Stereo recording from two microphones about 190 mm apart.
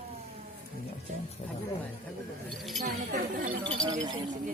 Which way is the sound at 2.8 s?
50° right (ahead or behind).